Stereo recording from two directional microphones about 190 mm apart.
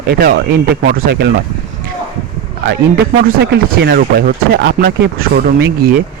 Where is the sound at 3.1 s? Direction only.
55° right (ahead or behind).